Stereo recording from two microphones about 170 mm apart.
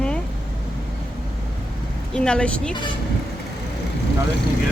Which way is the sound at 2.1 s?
5° left (ahead or behind).